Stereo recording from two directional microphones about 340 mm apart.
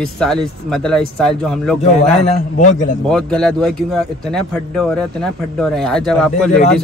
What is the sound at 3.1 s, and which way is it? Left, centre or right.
Speech, centre.